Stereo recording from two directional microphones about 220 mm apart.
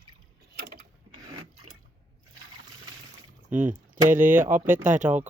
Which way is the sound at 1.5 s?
75° right (ahead or behind).